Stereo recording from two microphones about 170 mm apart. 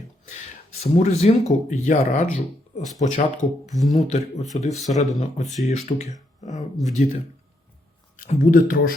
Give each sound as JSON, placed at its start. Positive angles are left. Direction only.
{"t": 0.8, "sound": "speech", "side_deg": 40}